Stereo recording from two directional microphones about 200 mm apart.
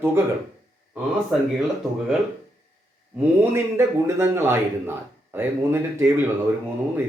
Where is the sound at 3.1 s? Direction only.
10° right (ahead or behind).